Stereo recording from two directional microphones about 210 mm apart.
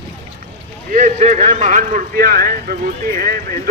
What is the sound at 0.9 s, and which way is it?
Speech, 35° right (ahead or behind).